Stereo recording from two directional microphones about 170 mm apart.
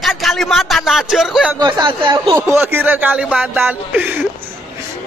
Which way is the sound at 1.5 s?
25° right (ahead or behind).